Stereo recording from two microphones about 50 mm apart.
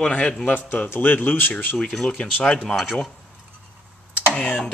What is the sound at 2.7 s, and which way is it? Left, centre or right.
Speech, centre.